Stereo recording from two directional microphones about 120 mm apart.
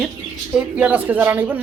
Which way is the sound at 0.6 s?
10° right (ahead or behind).